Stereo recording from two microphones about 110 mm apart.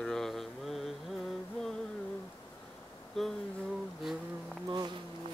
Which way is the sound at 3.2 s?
Centre (ahead or behind).